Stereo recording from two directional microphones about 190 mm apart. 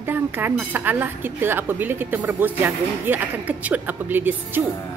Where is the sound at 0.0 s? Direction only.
10° right (ahead or behind).